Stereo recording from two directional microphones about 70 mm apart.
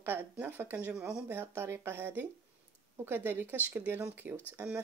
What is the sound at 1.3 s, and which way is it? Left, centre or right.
Speech, right.